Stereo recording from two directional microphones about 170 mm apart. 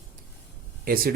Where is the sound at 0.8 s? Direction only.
60° right (ahead or behind).